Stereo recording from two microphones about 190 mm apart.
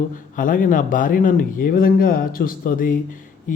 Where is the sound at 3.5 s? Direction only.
45° left (ahead or behind).